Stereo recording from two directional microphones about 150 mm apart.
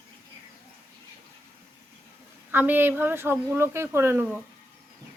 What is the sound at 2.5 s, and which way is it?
Speech, 15° right (ahead or behind).